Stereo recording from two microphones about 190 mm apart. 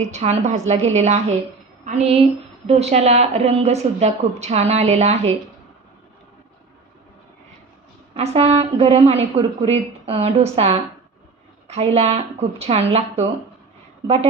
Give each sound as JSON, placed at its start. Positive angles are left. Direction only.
{"t": 0.0, "sound": "a woman's voice", "side_deg": -35}
{"t": 8.1, "sound": "a woman's voice", "side_deg": -35}